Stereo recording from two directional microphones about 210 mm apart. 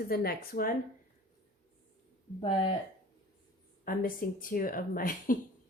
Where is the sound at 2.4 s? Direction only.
25° left (ahead or behind).